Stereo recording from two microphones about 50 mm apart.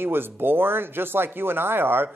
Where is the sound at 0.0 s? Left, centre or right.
Right.